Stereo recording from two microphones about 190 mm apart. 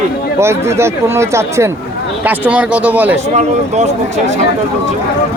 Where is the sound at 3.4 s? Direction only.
35° right (ahead or behind).